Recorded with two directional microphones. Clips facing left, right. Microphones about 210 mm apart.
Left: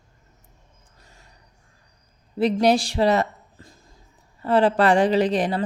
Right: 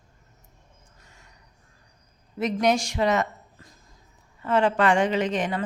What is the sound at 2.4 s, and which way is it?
Speech, 30° left (ahead or behind).